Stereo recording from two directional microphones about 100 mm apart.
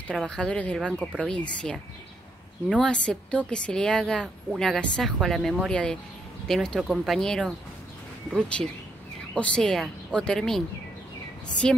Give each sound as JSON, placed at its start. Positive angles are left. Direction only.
{"t": 0.3, "sound": "a woman's voice", "side_deg": 10}
{"t": 2.8, "sound": "a woman's voice", "side_deg": 10}